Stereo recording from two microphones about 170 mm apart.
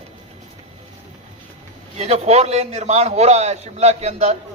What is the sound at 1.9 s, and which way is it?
A man's voice, 40° right (ahead or behind).